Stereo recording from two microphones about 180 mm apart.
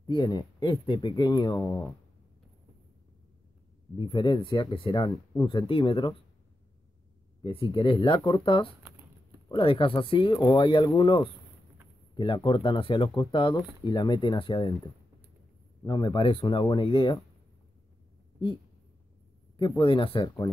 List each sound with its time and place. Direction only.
0.0 s speech: 25° left (ahead or behind)
1.6 s speech: 10° left (ahead or behind)
3.9 s speech: 25° left (ahead or behind)
7.4 s speech: 30° left (ahead or behind)
15.8 s speech: 25° left (ahead or behind)
19.5 s speech: 25° left (ahead or behind)